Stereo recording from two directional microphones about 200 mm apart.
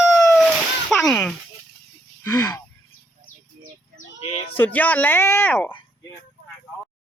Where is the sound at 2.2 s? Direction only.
15° left (ahead or behind).